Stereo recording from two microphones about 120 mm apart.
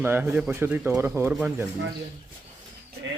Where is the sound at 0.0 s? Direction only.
20° right (ahead or behind).